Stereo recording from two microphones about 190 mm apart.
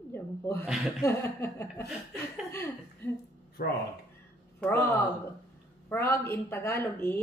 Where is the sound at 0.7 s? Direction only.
Centre (ahead or behind).